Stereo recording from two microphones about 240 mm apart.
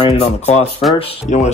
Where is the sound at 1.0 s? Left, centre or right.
Left.